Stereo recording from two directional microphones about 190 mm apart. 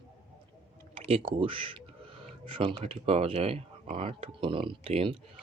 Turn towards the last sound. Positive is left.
turn(degrees=-30)  # may be behind; listen again after turning